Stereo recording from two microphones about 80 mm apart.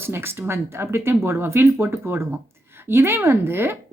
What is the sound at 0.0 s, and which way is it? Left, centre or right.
Speech, right.